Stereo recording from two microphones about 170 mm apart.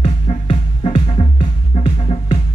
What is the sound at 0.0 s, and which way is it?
Music, 35° left (ahead or behind).